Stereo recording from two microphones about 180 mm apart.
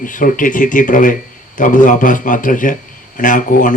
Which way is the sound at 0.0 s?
45° left (ahead or behind).